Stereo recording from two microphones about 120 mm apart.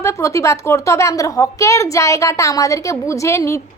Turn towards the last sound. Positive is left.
turn(degrees=25)  # may be behind; listen again after turning